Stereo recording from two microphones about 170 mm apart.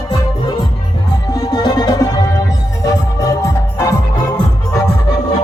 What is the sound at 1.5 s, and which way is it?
Music, 25° left (ahead or behind).